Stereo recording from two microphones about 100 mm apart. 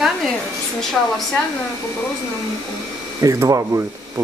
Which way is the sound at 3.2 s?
30° right (ahead or behind).